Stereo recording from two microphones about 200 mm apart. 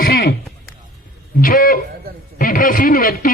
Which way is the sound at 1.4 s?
45° left (ahead or behind).